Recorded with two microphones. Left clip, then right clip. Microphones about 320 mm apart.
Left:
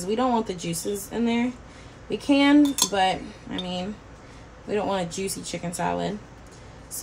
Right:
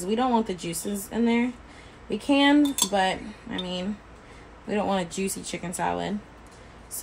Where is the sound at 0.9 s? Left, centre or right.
Centre.